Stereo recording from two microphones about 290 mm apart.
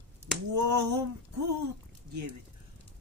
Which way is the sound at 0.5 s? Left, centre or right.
Right.